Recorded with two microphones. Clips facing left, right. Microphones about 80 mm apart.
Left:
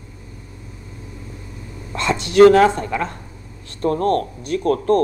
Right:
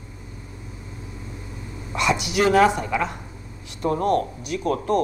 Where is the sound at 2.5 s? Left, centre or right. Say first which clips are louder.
Left 4 dB; centre.